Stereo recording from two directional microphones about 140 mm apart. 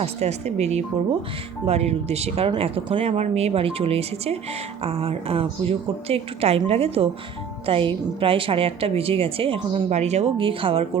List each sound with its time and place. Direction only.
0.0 s a woman's voice: 50° right (ahead or behind)